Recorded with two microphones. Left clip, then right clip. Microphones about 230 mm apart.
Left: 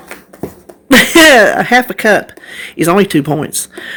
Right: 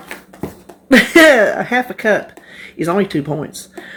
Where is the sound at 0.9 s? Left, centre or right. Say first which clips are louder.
Left 3 dB; left.